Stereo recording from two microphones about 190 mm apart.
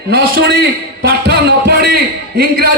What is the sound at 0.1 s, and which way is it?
A man's voice, 50° right (ahead or behind).